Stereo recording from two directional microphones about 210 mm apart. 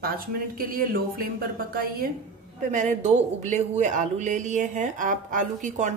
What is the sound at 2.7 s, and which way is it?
A woman's voice, 35° right (ahead or behind).